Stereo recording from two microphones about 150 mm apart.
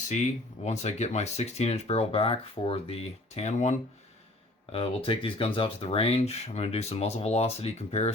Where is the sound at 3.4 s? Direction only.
50° left (ahead or behind).